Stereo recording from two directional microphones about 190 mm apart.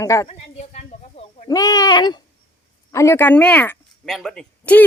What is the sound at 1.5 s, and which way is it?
Speech, 20° left (ahead or behind).